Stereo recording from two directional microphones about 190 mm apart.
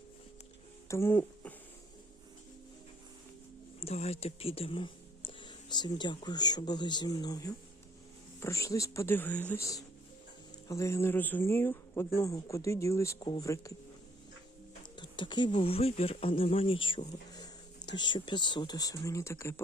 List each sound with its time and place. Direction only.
0.9 s speech: 15° left (ahead or behind)
3.8 s speech: 35° left (ahead or behind); by 13.7 s 15° left (ahead or behind)
15.1 s speech: 25° left (ahead or behind)